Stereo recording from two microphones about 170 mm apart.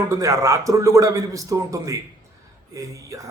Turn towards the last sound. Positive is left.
turn(degrees=-20)  # may be behind; listen again after turning